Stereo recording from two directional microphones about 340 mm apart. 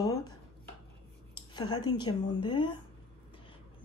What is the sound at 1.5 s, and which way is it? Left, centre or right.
Speech, centre.